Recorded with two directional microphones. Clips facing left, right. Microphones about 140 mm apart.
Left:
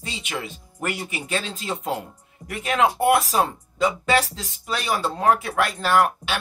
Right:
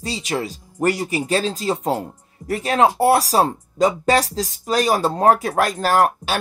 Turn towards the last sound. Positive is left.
turn(degrees=-40)  # may be behind; listen again after turning